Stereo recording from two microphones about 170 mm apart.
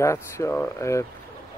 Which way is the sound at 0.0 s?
15° left (ahead or behind).